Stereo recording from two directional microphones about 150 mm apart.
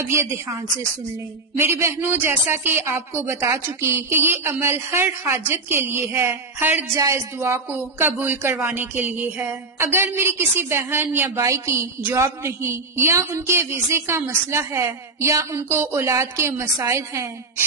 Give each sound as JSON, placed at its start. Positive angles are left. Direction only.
{"t": 0.1, "sound": "speech", "side_deg": -20}
{"t": 1.6, "sound": "a woman's voice", "side_deg": -20}